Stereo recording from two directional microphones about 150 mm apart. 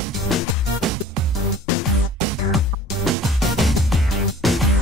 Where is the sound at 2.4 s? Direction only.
Centre (ahead or behind).